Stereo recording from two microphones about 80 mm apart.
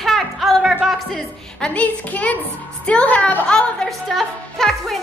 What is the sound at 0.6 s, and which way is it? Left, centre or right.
Music, centre.